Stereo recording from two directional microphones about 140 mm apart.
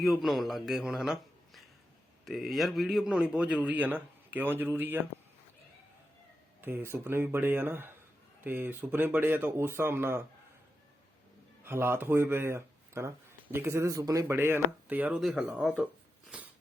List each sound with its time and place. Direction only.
0.0 s a man's voice: centre (ahead or behind)
6.6 s a man's voice: 15° right (ahead or behind)
11.6 s speech: 15° right (ahead or behind)